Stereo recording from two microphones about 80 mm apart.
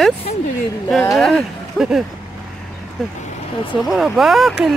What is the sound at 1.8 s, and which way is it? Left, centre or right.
Speech, centre.